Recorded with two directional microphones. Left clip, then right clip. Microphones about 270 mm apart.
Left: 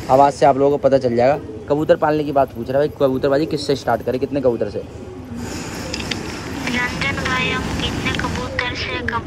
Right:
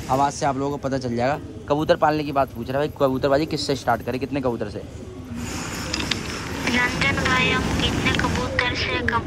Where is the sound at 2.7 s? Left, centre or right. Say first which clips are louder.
Left 5 dB; centre.